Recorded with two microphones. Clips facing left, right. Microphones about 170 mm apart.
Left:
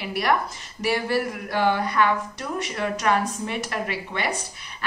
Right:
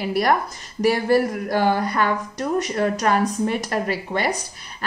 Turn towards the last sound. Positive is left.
turn(degrees=-40)  # may be behind; listen again after turning